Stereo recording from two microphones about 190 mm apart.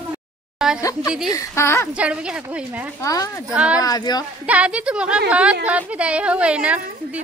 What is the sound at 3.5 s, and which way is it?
Speech, 5° right (ahead or behind).